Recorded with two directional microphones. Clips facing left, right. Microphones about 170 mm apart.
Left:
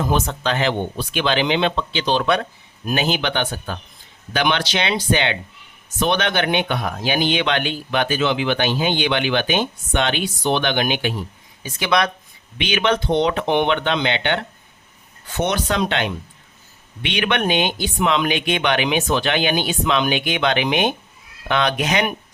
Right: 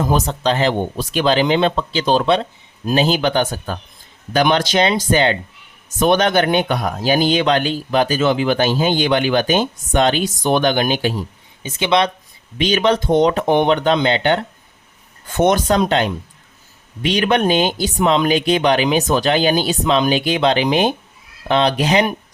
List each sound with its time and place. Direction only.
0.0 s speech: 40° right (ahead or behind)
2.2 s speech: 30° right (ahead or behind)
11.6 s speech: 25° right (ahead or behind)
12.5 s speech: 40° right (ahead or behind)